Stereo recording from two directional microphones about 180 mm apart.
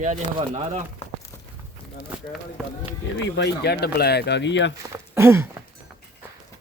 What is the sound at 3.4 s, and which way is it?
Speech, 65° left (ahead or behind).